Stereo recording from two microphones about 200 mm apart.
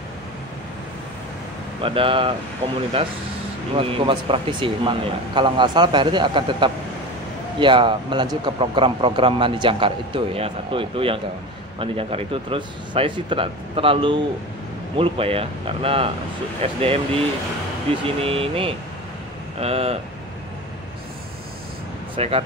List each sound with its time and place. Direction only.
1.8 s speech: 25° right (ahead or behind)
3.7 s speech: 25° right (ahead or behind)
22.1 s speech: 30° right (ahead or behind)